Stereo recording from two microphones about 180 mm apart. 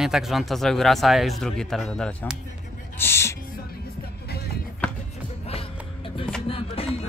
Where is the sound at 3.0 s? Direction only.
15° left (ahead or behind).